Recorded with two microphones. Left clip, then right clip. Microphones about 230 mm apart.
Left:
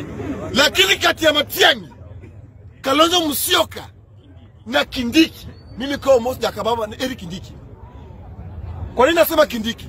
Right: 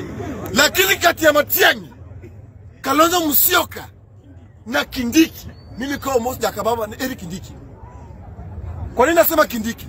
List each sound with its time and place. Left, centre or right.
0.2 s a man's voice: left
0.5 s a man's voice: centre
8.9 s a man's voice: centre